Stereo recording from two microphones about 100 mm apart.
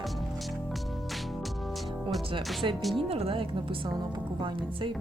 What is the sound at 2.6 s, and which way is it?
Speech, 55° right (ahead or behind).